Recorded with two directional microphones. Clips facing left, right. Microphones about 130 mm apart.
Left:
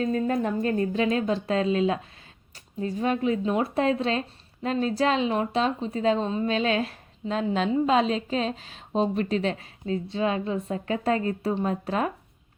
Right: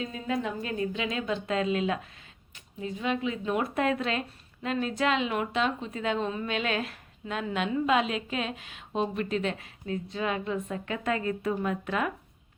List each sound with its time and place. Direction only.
0.0 s speech: 45° left (ahead or behind)